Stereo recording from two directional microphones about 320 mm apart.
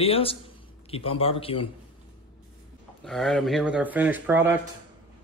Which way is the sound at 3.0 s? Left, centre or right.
Centre.